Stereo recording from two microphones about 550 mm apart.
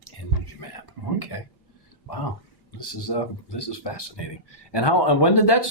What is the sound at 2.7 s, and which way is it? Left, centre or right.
Speech, left.